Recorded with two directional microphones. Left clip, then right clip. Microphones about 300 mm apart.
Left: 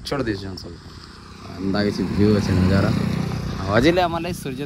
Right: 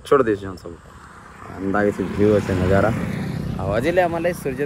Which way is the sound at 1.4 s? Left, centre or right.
Left.